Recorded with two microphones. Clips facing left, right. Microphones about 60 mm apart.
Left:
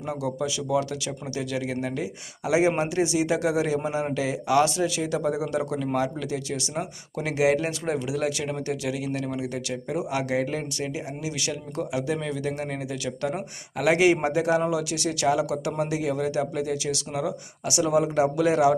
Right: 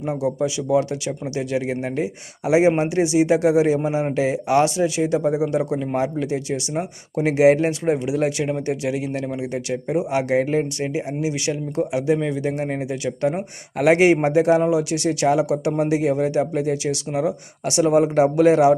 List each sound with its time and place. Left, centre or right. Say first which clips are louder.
0.1 s speech: right 6 dB; right
13.7 s a man's voice: right 5 dB; right
17.7 s a man's voice: right 6 dB; right